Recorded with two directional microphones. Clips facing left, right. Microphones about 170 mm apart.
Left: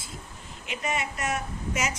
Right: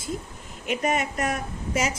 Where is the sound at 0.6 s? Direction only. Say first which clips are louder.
Right 6 dB; 45° right (ahead or behind).